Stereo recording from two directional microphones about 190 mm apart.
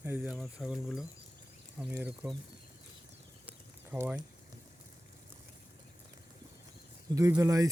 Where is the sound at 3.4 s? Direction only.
10° right (ahead or behind).